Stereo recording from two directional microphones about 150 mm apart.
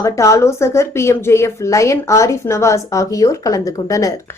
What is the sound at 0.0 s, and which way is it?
A woman's voice, 20° left (ahead or behind).